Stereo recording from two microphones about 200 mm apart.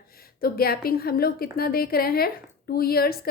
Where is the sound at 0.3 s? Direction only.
50° left (ahead or behind).